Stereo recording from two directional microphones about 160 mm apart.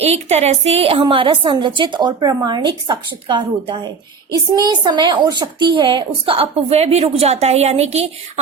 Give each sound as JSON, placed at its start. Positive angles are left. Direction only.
{"t": 0.0, "sound": "a woman's voice", "side_deg": -40}